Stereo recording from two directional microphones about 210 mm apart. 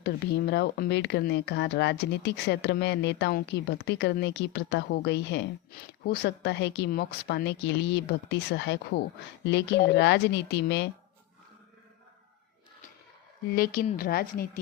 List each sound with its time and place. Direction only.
0.0 s speech: 50° left (ahead or behind)
13.5 s a woman's voice: 45° left (ahead or behind)